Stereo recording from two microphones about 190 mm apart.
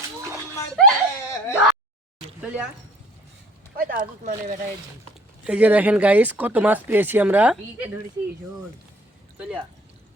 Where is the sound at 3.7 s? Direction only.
50° right (ahead or behind).